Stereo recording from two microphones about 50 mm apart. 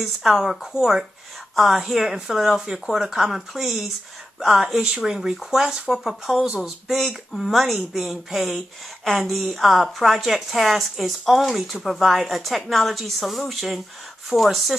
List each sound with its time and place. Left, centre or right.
0.0 s speech: centre